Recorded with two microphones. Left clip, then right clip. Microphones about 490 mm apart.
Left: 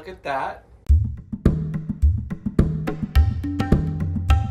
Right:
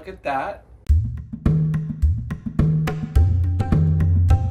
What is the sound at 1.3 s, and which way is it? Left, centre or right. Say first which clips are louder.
Music: even; left.